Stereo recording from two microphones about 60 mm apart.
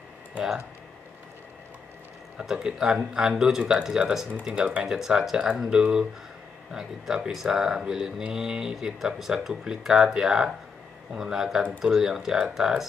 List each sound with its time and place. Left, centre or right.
2.3 s speech: centre